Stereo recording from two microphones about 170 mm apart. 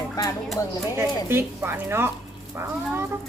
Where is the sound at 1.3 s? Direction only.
15° right (ahead or behind).